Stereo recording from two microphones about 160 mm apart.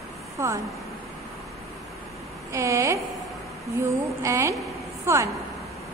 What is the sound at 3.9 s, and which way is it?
Speech, 20° right (ahead or behind).